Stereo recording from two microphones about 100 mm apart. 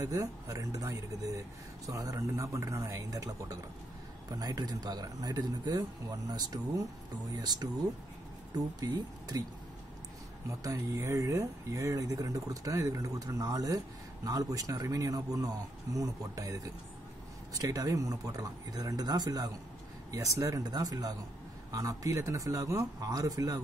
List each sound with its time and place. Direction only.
0.0 s speech: 35° right (ahead or behind)
8.7 s speech: 40° right (ahead or behind)
10.6 s speech: 35° right (ahead or behind)
20.1 s speech: 35° right (ahead or behind)